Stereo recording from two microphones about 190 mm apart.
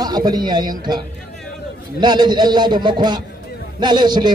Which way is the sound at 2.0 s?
25° right (ahead or behind).